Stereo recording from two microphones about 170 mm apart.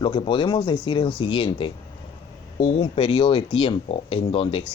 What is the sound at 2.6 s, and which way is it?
Speech, 40° left (ahead or behind).